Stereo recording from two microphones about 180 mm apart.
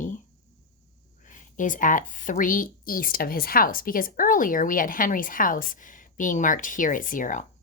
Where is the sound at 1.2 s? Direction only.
45° left (ahead or behind).